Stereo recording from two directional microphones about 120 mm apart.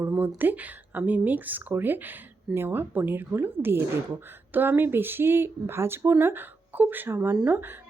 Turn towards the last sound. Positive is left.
turn(degrees=-15)  # may be behind; listen again after turning